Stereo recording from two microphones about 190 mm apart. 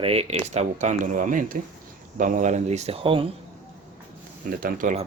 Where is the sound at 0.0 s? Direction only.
30° right (ahead or behind).